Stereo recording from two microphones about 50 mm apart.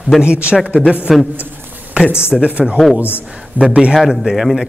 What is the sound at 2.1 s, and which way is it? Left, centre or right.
Speech, left.